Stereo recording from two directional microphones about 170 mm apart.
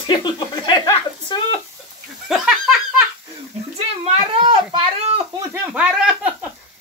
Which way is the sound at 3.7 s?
35° right (ahead or behind).